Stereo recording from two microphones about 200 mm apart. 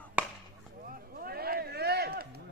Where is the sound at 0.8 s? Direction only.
45° right (ahead or behind).